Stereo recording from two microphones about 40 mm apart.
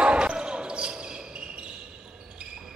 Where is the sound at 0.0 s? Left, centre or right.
Right.